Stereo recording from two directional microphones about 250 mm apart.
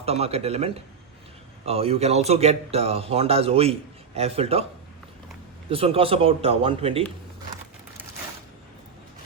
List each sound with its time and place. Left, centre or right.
0.0 s speech: right
5.6 s speech: right